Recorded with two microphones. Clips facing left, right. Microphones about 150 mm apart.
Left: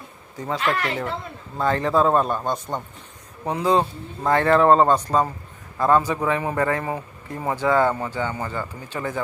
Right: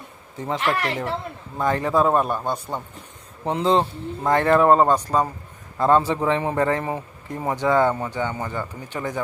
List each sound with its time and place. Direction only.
0.3 s a man's voice: 20° right (ahead or behind)
3.4 s a man's voice: 25° right (ahead or behind)
5.7 s a man's voice: 25° right (ahead or behind)